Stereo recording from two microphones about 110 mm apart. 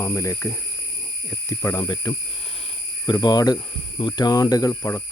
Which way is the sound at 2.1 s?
35° left (ahead or behind).